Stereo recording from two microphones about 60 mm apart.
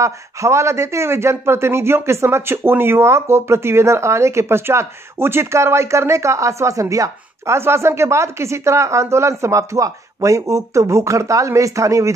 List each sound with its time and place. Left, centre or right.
0.0 s speech: right